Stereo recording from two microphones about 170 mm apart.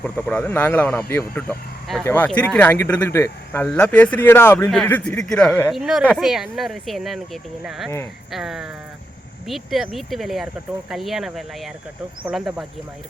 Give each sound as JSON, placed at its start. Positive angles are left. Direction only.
{"t": 0.0, "sound": "speech", "side_deg": 10}
{"t": 8.3, "sound": "speech", "side_deg": 0}